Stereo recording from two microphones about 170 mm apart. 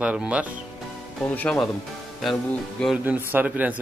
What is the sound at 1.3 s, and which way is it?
Speech, 5° left (ahead or behind).